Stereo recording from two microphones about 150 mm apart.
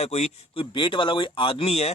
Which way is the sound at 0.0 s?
45° left (ahead or behind).